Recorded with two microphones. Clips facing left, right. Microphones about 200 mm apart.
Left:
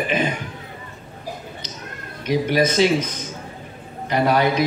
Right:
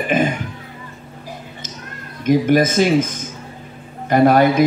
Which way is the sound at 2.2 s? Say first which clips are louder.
Right 5 dB; 50° right (ahead or behind).